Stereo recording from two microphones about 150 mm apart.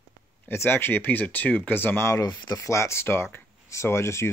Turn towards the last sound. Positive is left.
turn(degrees=20)  # may be behind; listen again after turning